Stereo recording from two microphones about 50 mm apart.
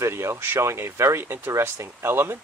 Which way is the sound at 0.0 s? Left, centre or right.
Right.